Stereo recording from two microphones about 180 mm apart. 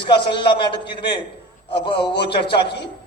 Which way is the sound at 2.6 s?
65° left (ahead or behind).